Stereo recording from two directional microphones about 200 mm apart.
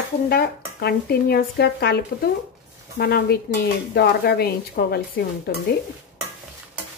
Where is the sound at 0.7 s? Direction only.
55° left (ahead or behind).